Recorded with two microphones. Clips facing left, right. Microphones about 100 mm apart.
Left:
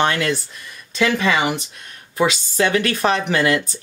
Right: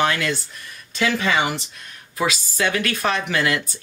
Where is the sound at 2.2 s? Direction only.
30° left (ahead or behind).